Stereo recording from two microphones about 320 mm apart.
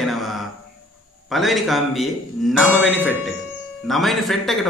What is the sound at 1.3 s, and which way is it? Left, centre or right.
Speech, centre.